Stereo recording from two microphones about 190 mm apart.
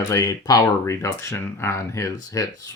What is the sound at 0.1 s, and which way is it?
Speech, 20° left (ahead or behind).